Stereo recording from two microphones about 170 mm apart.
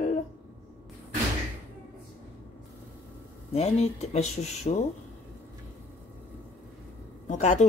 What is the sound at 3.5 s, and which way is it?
Speech, 40° left (ahead or behind).